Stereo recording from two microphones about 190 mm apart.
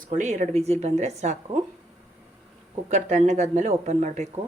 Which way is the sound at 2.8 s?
35° right (ahead or behind).